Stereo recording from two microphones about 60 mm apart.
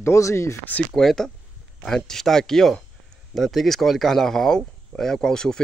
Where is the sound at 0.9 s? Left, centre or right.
Centre.